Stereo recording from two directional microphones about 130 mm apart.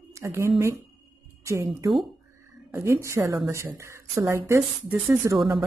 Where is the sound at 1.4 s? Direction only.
20° right (ahead or behind).